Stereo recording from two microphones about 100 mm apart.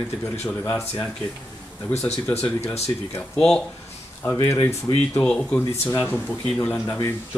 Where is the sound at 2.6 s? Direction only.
25° left (ahead or behind).